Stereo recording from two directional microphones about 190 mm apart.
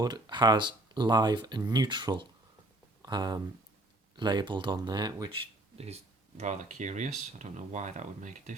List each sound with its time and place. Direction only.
0.0 s speech: 25° right (ahead or behind); by 8.5 s 40° right (ahead or behind)